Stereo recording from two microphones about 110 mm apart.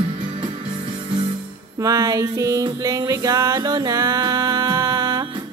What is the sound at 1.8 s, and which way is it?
Music, 30° right (ahead or behind).